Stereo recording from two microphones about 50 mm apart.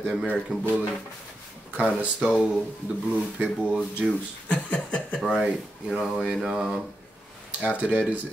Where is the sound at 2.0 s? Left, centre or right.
Right.